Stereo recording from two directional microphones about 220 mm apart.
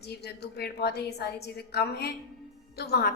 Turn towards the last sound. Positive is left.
turn(degrees=45)  # may be behind; listen again after turning